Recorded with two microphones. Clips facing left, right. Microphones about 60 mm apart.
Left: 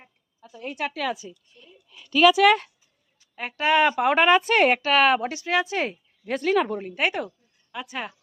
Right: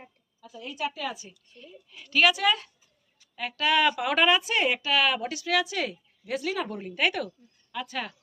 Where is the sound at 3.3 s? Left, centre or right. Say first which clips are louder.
Left 4 dB; left.